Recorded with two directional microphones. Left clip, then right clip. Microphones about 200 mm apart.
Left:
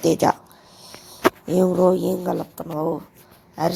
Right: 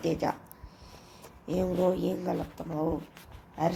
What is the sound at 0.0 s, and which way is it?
Speech, 35° left (ahead or behind).